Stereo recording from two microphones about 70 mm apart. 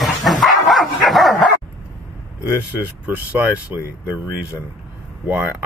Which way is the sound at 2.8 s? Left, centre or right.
Right.